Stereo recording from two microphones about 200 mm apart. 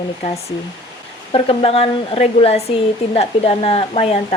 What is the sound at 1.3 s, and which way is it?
Speech, 25° left (ahead or behind).